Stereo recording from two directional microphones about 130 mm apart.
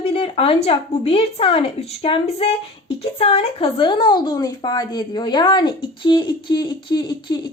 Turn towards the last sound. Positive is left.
turn(degrees=40)  # may be behind; listen again after turning